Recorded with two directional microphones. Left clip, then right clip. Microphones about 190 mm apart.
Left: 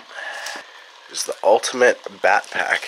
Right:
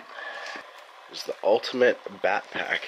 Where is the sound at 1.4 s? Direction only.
15° left (ahead or behind).